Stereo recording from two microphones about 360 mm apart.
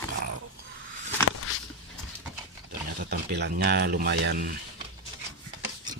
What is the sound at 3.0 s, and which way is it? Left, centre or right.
Speech, right.